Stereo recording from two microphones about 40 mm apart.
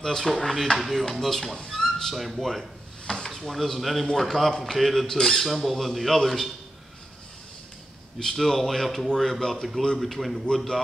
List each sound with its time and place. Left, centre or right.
0.0 s a man's voice: centre
0.7 s squawk: centre
1.7 s a sound: centre
2.1 s squawk: centre
3.3 s a man's voice: centre
5.1 s squawk: centre
8.2 s a man's voice: centre
9.9 s squawk: centre